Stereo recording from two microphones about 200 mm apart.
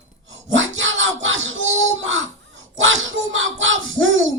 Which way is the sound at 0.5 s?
70° right (ahead or behind).